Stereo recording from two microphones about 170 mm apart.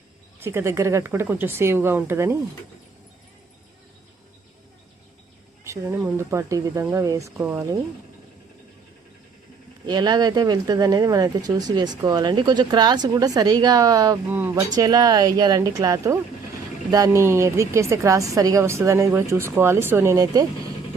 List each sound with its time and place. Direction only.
0.3 s a woman's voice: 15° right (ahead or behind)
5.6 s a woman's voice: 15° right (ahead or behind)
9.8 s speech: 25° right (ahead or behind)
14.3 s a woman's voice: 10° right (ahead or behind)
14.8 s a woman's voice: 20° right (ahead or behind)